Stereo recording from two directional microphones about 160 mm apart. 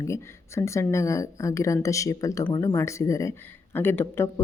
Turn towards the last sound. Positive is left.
turn(degrees=15)  # may be behind; listen again after turning